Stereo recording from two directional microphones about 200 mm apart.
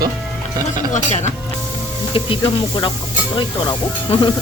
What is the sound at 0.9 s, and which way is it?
Speech, 35° left (ahead or behind).